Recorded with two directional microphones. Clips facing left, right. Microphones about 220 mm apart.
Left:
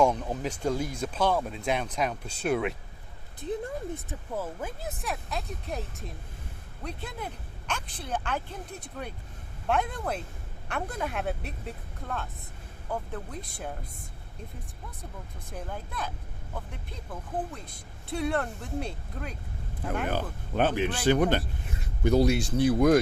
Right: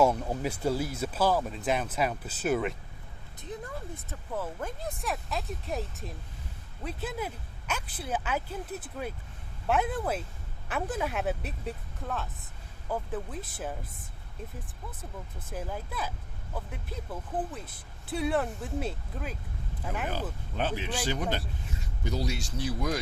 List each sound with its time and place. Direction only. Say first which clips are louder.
0.0 s speech: even; 5° right (ahead or behind)
3.4 s speech: left 7 dB; 25° left (ahead or behind)
4.1 s speech: left 1 dB; 10° left (ahead or behind)
15.5 s speech: right 1 dB; 5° right (ahead or behind)
20.1 s speech: left 3 dB; 55° left (ahead or behind)